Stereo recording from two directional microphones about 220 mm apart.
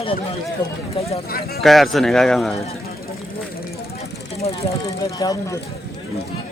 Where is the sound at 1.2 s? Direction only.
45° left (ahead or behind).